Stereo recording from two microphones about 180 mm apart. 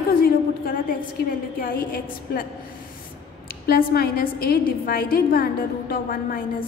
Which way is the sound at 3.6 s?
60° left (ahead or behind).